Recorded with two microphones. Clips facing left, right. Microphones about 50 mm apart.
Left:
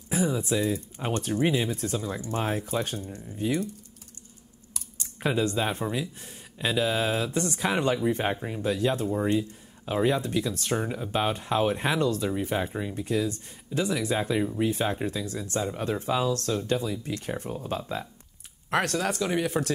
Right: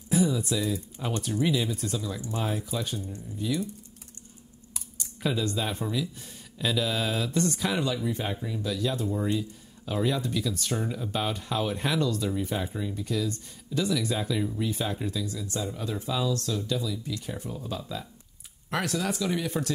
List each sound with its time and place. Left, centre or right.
0.1 s speech: left
4.9 s speech: left
7.8 s speech: left
19.1 s speech: left
19.4 s speech: centre